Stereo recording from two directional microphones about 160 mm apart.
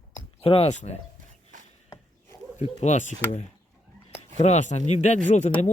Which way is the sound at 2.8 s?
50° left (ahead or behind).